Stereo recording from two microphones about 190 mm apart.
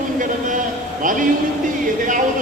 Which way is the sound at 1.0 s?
45° right (ahead or behind).